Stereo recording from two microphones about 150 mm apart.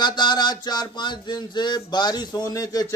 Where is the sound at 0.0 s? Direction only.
30° left (ahead or behind).